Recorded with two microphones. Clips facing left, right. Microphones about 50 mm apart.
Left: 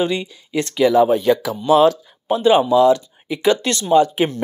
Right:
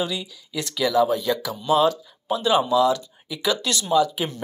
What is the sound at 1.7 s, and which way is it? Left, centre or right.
Speech, left.